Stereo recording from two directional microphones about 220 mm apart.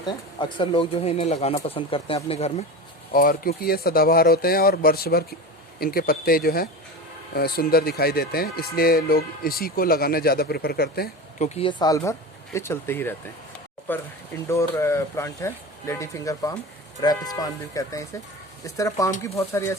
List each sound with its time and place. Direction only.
0.0 s speech: 20° left (ahead or behind)
3.1 s speech: 40° left (ahead or behind)
11.4 s speech: 25° left (ahead or behind)